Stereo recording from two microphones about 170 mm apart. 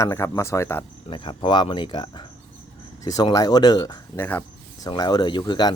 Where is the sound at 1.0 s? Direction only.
30° left (ahead or behind).